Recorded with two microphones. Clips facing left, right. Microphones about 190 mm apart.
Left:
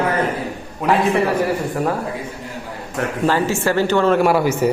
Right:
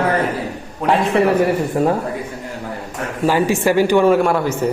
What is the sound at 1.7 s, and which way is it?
Speech, 20° right (ahead or behind).